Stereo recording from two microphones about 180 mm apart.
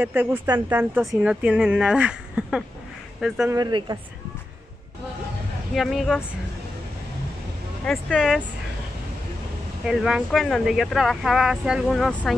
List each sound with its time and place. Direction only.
0.0 s speech: 10° right (ahead or behind)
3.5 s speech: 20° right (ahead or behind)
5.8 s speech: centre (ahead or behind)
7.8 s speech: 5° left (ahead or behind)
9.8 s speech: 5° right (ahead or behind)